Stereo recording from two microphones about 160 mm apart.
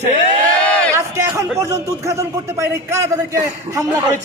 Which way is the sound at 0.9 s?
20° right (ahead or behind).